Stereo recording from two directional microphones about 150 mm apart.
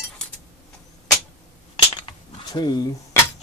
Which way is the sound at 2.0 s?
30° left (ahead or behind).